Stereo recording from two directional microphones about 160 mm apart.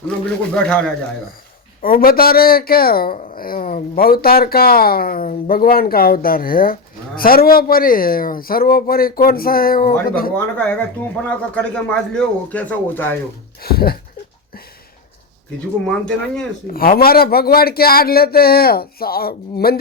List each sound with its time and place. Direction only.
0.5 s speech: 5° left (ahead or behind)
1.8 s speech: 65° left (ahead or behind)
10.3 s speech: 10° left (ahead or behind)
13.6 s speech: 75° left (ahead or behind)
15.9 s speech: 5° left (ahead or behind)
16.7 s speech: 65° left (ahead or behind)